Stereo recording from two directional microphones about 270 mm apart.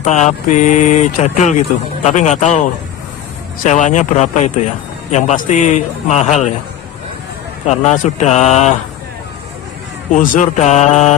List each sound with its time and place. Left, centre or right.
0.0 s speech: left
3.6 s speech: left
7.8 s speech: left
10.1 s speech: left